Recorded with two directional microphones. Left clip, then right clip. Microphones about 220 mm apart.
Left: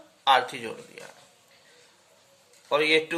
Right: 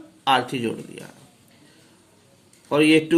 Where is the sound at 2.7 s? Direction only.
10° right (ahead or behind).